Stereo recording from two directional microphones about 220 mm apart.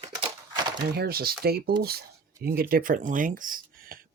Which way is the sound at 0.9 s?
45° right (ahead or behind).